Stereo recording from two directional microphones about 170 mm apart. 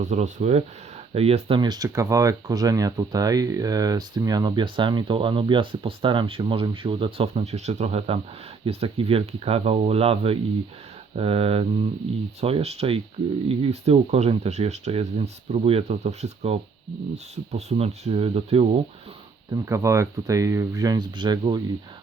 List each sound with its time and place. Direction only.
0.0 s speech: 45° right (ahead or behind)
19.5 s speech: 15° right (ahead or behind)